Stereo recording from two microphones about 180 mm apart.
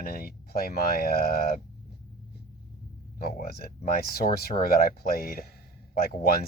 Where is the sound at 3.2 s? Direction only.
55° left (ahead or behind).